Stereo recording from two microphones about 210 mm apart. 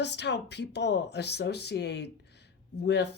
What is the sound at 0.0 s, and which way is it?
Speech, 55° left (ahead or behind).